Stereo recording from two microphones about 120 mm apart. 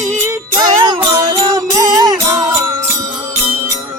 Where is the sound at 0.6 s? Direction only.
40° right (ahead or behind).